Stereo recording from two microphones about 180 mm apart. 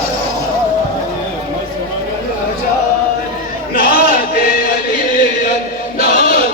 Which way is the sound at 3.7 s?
55° left (ahead or behind).